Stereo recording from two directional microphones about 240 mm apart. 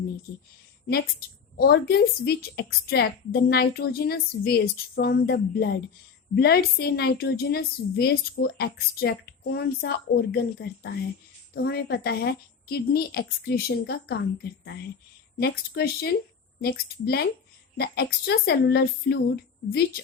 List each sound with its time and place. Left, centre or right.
1.2 s a woman's voice: left
15.4 s a woman's voice: left